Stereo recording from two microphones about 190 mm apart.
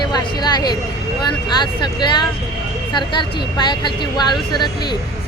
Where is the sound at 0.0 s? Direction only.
20° left (ahead or behind).